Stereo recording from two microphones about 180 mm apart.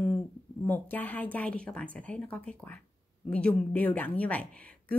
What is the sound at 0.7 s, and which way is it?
A woman's voice, 10° left (ahead or behind).